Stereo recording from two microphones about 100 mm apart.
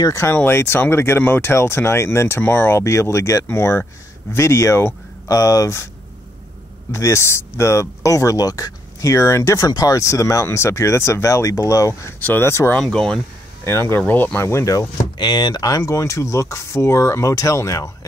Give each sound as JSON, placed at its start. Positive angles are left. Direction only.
{"t": 0.0, "sound": "speech", "side_deg": 30}
{"t": 6.9, "sound": "speech", "side_deg": 30}
{"t": 12.7, "sound": "speech", "side_deg": 5}
{"t": 13.7, "sound": "speech", "side_deg": 25}
{"t": 15.1, "sound": "speech", "side_deg": 50}